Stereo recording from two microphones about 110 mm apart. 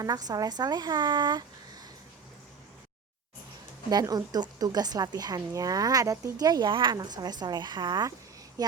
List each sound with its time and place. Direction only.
0.0 s a woman's voice: 35° right (ahead or behind)
3.8 s a woman's voice: 35° right (ahead or behind)